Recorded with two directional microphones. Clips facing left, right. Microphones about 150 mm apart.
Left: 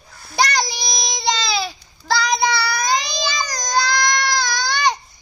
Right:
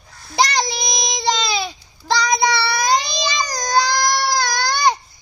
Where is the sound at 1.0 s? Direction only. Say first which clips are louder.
Right 1 dB; 20° right (ahead or behind).